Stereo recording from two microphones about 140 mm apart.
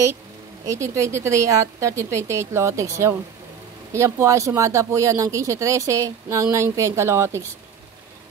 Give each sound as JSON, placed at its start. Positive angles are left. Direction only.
{"t": 0.7, "sound": "speech", "side_deg": -20}